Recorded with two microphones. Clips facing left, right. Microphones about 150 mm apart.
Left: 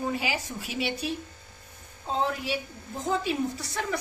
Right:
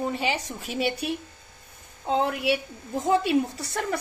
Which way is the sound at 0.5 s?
45° right (ahead or behind).